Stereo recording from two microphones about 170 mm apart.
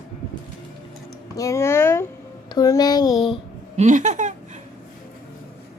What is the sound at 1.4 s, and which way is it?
A child's voice, 15° left (ahead or behind).